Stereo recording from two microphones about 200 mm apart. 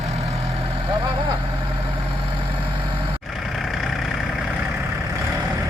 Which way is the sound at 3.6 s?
Centre (ahead or behind).